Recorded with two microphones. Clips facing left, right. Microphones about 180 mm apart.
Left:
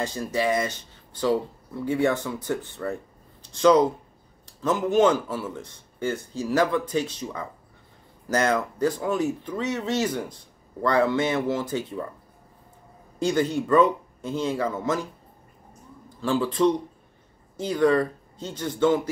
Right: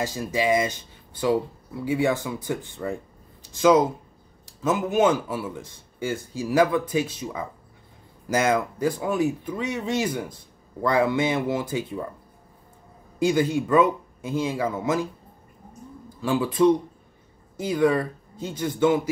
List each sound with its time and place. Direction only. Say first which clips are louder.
0.0 s speech: right 1 dB; 5° right (ahead or behind)
13.2 s speech: right 2 dB; 10° right (ahead or behind)
16.2 s speech: right 1 dB; 10° right (ahead or behind)